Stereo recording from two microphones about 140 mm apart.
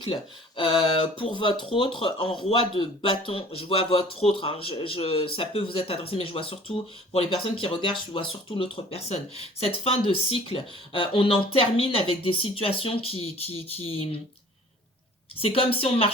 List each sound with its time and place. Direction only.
0.0 s speech: 35° left (ahead or behind)
15.4 s speech: 45° left (ahead or behind)